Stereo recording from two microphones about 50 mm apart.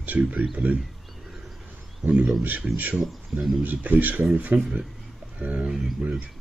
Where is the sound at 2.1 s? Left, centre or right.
Right.